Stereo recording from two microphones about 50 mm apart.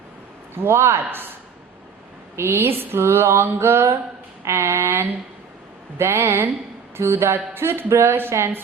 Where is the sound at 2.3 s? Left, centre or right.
Right.